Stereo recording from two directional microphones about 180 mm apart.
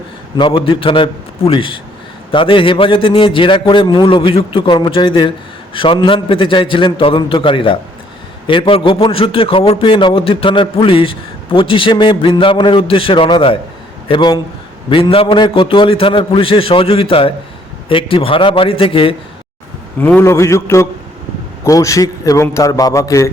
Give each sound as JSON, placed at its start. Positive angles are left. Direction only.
{"t": 0.3, "sound": "a man's voice", "side_deg": 30}
{"t": 20.0, "sound": "a man's voice", "side_deg": 10}